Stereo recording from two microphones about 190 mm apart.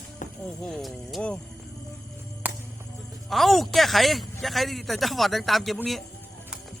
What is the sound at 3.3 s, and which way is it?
A man's voice, centre (ahead or behind).